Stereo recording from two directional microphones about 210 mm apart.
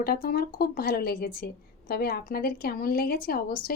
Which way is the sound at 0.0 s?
45° left (ahead or behind).